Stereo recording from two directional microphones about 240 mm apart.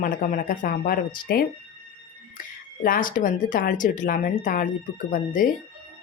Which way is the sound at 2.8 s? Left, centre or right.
Left.